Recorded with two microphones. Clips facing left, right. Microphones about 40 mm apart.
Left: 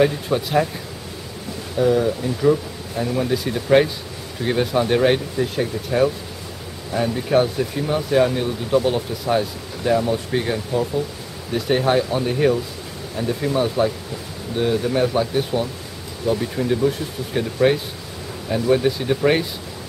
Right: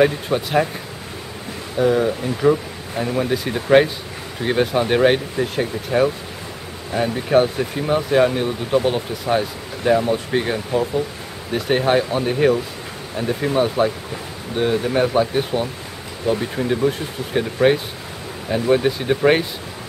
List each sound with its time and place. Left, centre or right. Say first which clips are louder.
0.0 s speech: right 1 dB; centre
1.8 s speech: right 1 dB; centre